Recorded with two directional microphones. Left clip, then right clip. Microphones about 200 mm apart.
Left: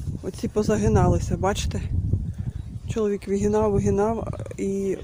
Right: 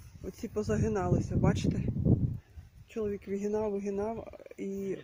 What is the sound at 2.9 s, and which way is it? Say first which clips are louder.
Speech: left 10 dB; 15° left (ahead or behind).